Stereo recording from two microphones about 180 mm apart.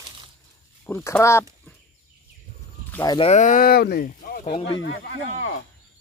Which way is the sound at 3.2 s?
40° left (ahead or behind).